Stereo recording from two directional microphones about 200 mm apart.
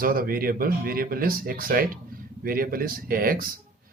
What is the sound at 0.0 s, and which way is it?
Speech, 45° right (ahead or behind).